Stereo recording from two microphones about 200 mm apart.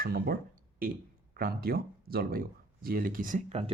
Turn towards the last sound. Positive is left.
turn(degrees=-35)  # may be behind; listen again after turning